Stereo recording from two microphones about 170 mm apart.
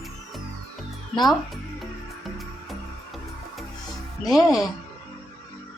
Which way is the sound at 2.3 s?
Centre (ahead or behind).